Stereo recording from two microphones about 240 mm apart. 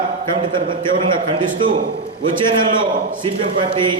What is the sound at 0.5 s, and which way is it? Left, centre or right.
A man's voice, centre.